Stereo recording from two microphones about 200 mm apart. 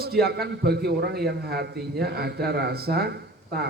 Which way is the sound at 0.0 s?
50° right (ahead or behind).